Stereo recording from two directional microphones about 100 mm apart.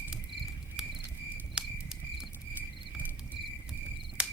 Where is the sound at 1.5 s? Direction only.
5° right (ahead or behind).